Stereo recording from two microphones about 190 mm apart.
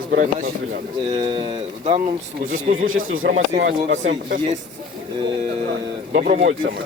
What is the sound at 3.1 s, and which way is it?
Speech, 90° right.